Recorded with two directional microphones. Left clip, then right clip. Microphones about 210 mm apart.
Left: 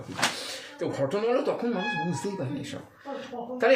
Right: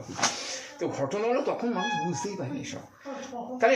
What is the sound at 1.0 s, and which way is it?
Speech, 15° left (ahead or behind).